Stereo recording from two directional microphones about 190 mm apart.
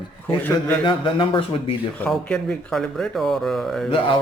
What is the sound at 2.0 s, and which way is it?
Speech, 5° left (ahead or behind).